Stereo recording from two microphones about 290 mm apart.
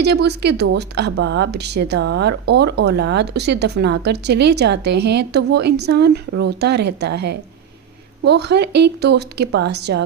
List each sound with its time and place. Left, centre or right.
0.0 s speech: right